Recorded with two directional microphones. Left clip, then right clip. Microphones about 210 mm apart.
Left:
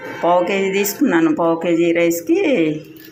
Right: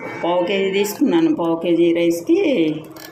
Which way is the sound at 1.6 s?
Centre (ahead or behind).